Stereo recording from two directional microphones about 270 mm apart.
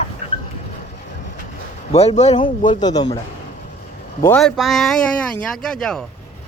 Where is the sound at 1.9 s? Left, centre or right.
Left.